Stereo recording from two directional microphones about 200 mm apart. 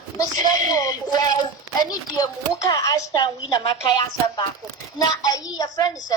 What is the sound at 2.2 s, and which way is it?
A child's voice, 20° left (ahead or behind).